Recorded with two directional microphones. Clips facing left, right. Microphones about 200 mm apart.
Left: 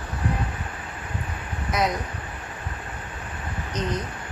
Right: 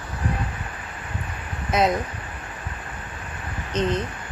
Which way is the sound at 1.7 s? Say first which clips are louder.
Right 4 dB; 25° right (ahead or behind).